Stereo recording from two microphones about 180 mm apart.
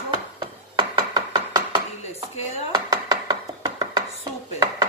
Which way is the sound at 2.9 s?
20° right (ahead or behind).